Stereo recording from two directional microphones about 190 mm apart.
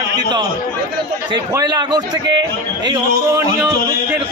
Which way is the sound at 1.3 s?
20° right (ahead or behind).